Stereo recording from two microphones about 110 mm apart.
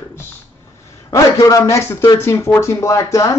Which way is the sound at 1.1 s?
30° left (ahead or behind).